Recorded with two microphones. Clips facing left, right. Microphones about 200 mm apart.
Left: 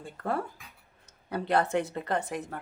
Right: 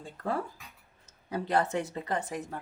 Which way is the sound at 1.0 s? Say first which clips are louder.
Left 2 dB; 65° left (ahead or behind).